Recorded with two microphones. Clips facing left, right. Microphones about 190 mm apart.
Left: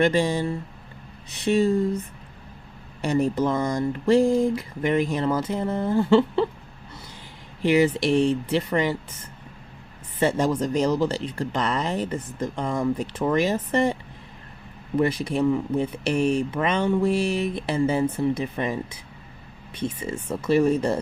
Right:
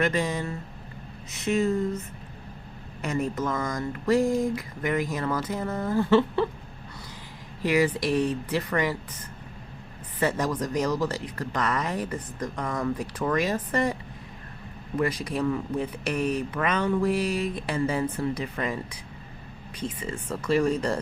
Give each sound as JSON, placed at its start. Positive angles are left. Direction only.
{"t": 0.0, "sound": "speech", "side_deg": 30}
{"t": 3.0, "sound": "speech", "side_deg": 35}
{"t": 7.6, "sound": "speech", "side_deg": 25}
{"t": 10.2, "sound": "speech", "side_deg": 25}
{"t": 14.9, "sound": "speech", "side_deg": 25}
{"t": 19.8, "sound": "speech", "side_deg": 25}